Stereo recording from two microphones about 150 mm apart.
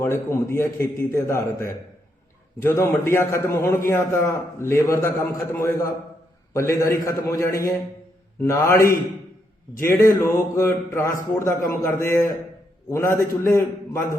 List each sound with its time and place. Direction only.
0.0 s a man's voice: 15° left (ahead or behind)
7.3 s mantra: 20° left (ahead or behind)
8.4 s a man's voice: 20° left (ahead or behind)
10.2 s mantra: 20° left (ahead or behind)
11.3 s a man's voice: 20° left (ahead or behind)